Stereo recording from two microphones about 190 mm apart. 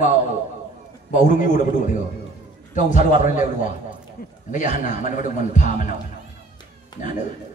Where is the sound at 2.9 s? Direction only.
40° left (ahead or behind).